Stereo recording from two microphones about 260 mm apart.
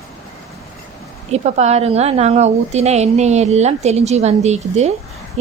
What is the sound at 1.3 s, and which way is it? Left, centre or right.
A woman's voice, right.